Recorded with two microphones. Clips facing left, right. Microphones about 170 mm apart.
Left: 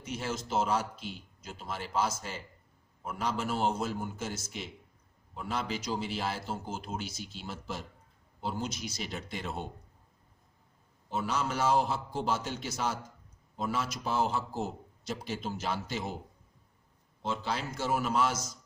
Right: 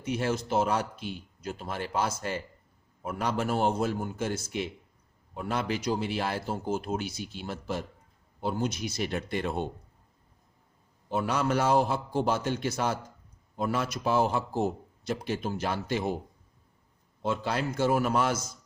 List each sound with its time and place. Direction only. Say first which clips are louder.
0.0 s a man's voice: right 7 dB; 55° right (ahead or behind)
11.1 s a man's voice: right 5 dB; 60° right (ahead or behind)
17.2 s a man's voice: right 5 dB; 55° right (ahead or behind)